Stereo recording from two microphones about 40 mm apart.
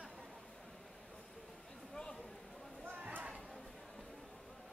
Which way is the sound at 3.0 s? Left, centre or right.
Right.